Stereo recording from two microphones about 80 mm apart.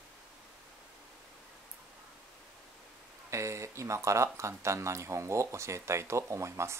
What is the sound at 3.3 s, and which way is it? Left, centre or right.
Speech, right.